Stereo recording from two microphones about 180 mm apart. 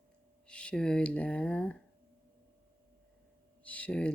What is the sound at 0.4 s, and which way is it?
Speech, 5° left (ahead or behind).